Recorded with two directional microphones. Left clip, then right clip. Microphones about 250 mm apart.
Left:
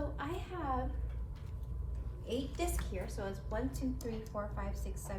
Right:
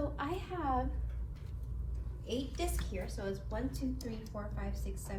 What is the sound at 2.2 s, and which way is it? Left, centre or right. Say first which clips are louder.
A woman's voice: even; centre.